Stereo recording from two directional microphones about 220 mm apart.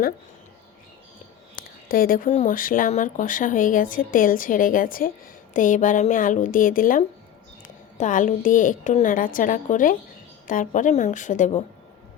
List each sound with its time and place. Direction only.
1.9 s speech: 40° left (ahead or behind)